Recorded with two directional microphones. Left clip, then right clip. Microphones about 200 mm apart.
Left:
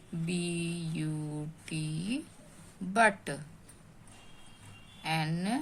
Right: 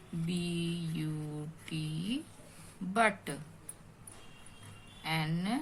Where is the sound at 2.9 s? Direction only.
35° left (ahead or behind).